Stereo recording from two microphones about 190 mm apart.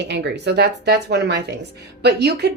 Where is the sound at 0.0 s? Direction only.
65° right (ahead or behind).